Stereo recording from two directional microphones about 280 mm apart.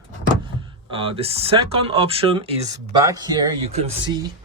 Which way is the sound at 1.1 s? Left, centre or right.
Right.